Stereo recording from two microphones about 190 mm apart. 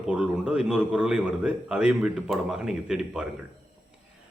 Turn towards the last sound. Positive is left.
turn(degrees=-5)  # may be behind; listen again after turning